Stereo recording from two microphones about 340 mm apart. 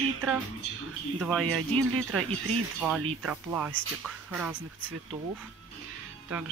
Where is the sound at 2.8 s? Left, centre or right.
Centre.